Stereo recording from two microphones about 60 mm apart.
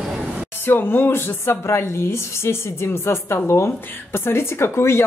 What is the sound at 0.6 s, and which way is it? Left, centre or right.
Speech, left.